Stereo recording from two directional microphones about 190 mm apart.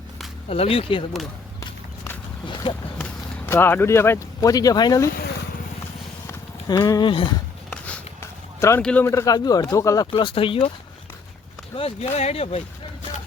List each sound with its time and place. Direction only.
0.4 s speech: 30° left (ahead or behind)
2.6 s speech: 25° left (ahead or behind)
3.0 s speech: 10° left (ahead or behind)
6.2 s a sound: 20° left (ahead or behind)
7.7 s a sound: 10° left (ahead or behind)
8.8 s speech: 5° left (ahead or behind); by 10.7 s 30° left (ahead or behind)
11.8 s speech: 30° left (ahead or behind)